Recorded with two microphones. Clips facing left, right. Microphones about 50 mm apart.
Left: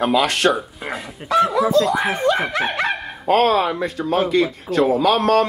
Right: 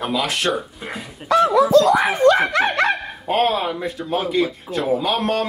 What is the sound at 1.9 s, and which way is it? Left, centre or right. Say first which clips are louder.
Speech: right 4 dB; right.